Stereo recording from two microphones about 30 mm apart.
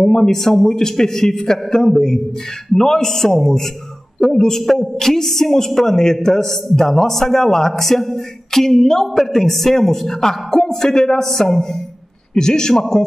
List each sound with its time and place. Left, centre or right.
0.0 s speech: centre
12.4 s a man's voice: left